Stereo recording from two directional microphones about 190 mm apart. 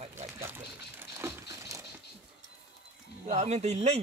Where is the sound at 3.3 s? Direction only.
35° right (ahead or behind).